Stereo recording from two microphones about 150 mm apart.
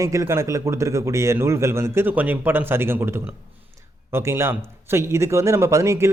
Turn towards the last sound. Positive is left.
turn(degrees=-20)  # may be behind; listen again after turning